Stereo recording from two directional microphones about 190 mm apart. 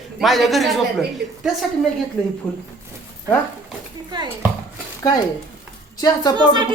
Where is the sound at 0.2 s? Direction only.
Centre (ahead or behind).